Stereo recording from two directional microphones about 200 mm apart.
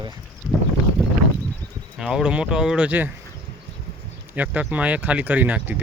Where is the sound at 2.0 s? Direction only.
5° right (ahead or behind).